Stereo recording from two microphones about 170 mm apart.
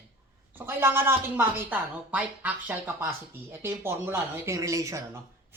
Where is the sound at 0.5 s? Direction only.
15° right (ahead or behind).